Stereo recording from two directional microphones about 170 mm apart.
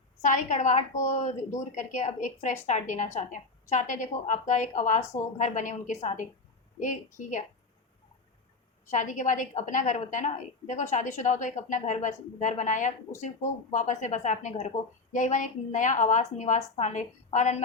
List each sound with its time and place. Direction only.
0.2 s a woman's voice: 45° left (ahead or behind)
8.9 s a woman's voice: 45° left (ahead or behind)